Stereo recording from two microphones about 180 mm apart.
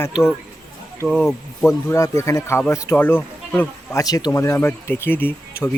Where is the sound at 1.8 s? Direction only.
15° left (ahead or behind).